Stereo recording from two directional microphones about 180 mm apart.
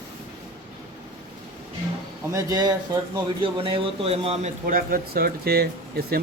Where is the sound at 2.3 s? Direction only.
20° right (ahead or behind).